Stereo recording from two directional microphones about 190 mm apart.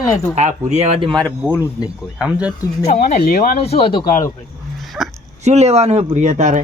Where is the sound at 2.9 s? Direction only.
50° left (ahead or behind).